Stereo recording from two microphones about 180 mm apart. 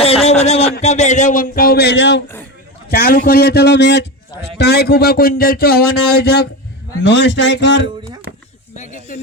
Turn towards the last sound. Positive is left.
turn(degrees=80)